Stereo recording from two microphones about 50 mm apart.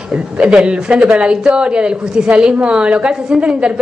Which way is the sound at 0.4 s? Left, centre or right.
Right.